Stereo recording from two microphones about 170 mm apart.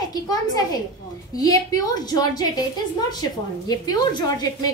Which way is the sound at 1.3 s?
20° left (ahead or behind).